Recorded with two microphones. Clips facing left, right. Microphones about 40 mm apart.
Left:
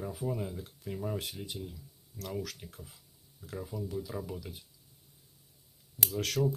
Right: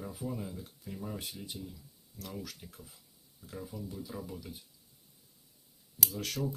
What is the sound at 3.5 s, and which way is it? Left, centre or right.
Speech, left.